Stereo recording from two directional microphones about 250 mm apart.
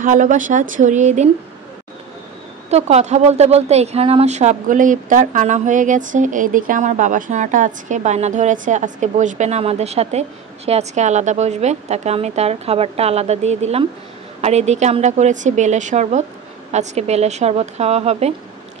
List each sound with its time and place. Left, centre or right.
0.0 s speech: right
2.7 s speech: right